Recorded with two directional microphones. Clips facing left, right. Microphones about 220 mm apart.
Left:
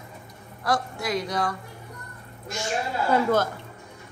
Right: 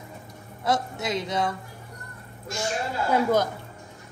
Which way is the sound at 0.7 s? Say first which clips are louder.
Even; 20° right (ahead or behind).